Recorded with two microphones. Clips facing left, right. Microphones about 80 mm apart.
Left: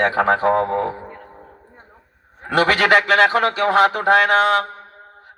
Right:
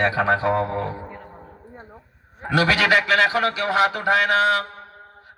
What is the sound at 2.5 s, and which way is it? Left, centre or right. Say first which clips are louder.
A man's voice: left 3 dB; left.